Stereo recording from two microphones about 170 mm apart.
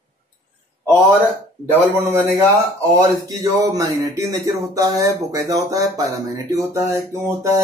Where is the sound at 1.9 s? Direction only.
15° right (ahead or behind).